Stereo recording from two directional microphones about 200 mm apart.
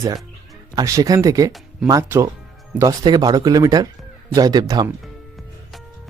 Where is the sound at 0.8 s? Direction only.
15° right (ahead or behind).